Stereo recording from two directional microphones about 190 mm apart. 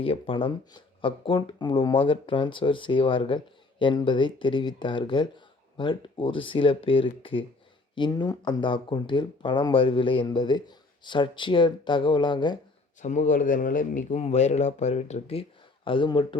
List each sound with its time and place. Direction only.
0.0 s speech: 30° left (ahead or behind)
13.0 s speech: 40° left (ahead or behind)